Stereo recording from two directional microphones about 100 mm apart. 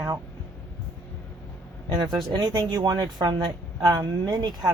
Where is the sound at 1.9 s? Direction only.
45° right (ahead or behind).